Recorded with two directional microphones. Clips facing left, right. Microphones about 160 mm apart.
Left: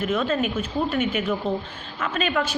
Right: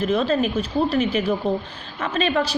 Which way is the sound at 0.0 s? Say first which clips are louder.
Right 3 dB; 35° right (ahead or behind).